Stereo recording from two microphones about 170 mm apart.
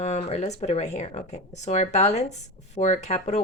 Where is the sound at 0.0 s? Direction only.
45° left (ahead or behind).